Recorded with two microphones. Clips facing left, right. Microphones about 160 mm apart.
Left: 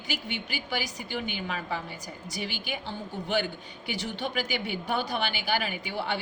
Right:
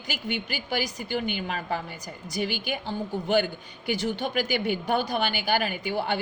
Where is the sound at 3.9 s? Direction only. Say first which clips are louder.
Right 5 dB; 45° right (ahead or behind).